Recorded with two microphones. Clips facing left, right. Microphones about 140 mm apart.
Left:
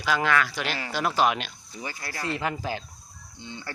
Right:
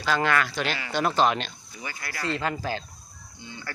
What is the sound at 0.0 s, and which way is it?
Speech, 5° left (ahead or behind).